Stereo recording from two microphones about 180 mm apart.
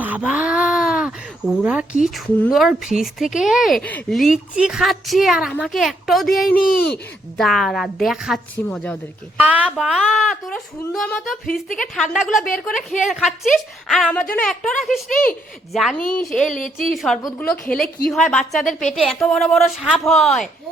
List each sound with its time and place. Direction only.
0.0 s a sound: 10° right (ahead or behind)
1.6 s speech: 5° right (ahead or behind)
9.4 s speech: 5° right (ahead or behind)
15.1 s a woman's voice: 50° left (ahead or behind)
15.7 s speech: centre (ahead or behind)
16.6 s a woman's voice: 45° left (ahead or behind)
16.9 s speech: centre (ahead or behind)